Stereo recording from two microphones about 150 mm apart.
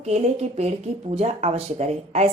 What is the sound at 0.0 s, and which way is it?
Speech, 45° right (ahead or behind).